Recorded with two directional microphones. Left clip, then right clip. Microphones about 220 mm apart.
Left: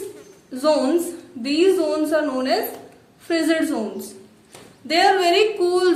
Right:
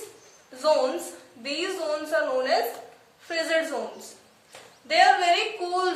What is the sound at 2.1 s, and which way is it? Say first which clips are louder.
Speech: left 3 dB; 40° left (ahead or behind).